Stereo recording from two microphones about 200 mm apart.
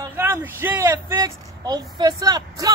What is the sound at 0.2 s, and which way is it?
Speech, 10° right (ahead or behind).